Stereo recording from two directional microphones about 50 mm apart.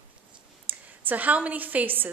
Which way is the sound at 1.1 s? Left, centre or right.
Right.